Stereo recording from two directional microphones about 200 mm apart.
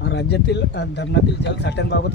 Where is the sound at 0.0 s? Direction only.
60° left (ahead or behind).